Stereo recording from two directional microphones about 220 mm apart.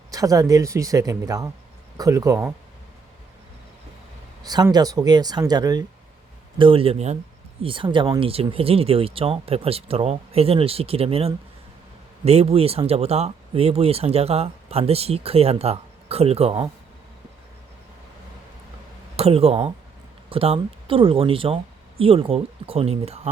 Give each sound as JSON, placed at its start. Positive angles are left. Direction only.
{"t": 0.1, "sound": "speech", "side_deg": -15}
{"t": 4.4, "sound": "speech", "side_deg": -20}
{"t": 19.1, "sound": "speech", "side_deg": -25}